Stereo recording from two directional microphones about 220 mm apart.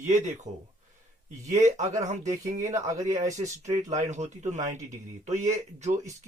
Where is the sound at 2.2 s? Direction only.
15° right (ahead or behind).